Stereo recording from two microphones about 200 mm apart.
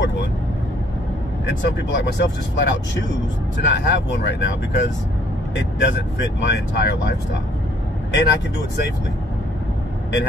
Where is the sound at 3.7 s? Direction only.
60° left (ahead or behind).